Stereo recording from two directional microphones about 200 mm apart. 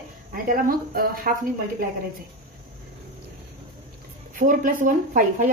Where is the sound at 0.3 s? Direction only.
45° right (ahead or behind).